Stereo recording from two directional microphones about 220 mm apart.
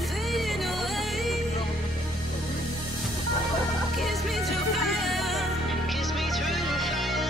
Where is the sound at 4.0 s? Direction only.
Centre (ahead or behind).